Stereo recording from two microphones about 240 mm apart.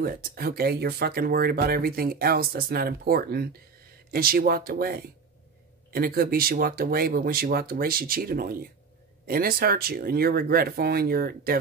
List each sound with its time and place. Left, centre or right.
0.0 s speech: right